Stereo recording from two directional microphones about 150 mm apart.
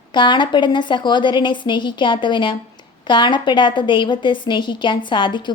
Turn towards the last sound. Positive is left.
turn(degrees=30)  # may be behind; listen again after turning